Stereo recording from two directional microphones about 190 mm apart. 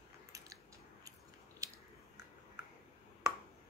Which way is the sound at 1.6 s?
15° right (ahead or behind).